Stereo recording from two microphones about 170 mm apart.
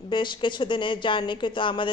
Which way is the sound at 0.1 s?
25° left (ahead or behind).